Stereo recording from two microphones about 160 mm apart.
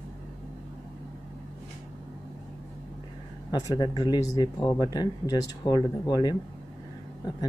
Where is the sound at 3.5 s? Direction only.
25° left (ahead or behind).